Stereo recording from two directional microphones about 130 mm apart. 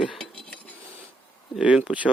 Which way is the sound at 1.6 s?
10° right (ahead or behind).